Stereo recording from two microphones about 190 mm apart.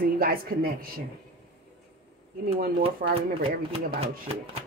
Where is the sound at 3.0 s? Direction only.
45° right (ahead or behind).